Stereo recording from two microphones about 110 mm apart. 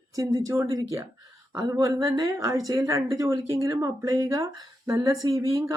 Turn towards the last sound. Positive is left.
turn(degrees=-35)  # may be behind; listen again after turning